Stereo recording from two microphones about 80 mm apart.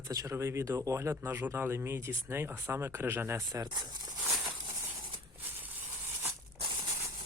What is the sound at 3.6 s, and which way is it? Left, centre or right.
Speech, right.